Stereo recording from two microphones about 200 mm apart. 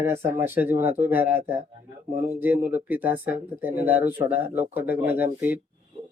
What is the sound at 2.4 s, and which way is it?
Speech, 10° right (ahead or behind).